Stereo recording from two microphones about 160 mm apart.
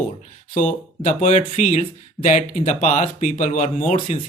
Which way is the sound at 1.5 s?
50° left (ahead or behind).